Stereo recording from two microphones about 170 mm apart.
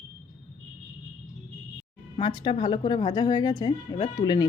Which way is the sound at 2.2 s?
30° left (ahead or behind).